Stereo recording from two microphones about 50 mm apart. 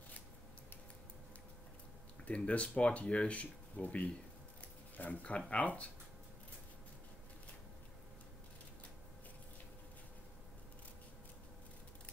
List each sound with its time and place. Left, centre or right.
2.2 s speech: left